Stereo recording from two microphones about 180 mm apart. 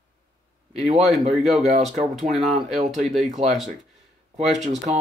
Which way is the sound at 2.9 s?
Centre (ahead or behind).